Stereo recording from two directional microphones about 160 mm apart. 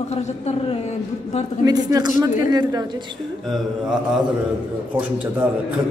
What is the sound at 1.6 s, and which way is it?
A woman's voice, 25° right (ahead or behind).